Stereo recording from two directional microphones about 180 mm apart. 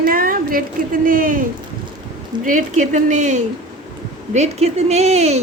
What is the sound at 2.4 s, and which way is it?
A woman's voice, 45° right (ahead or behind).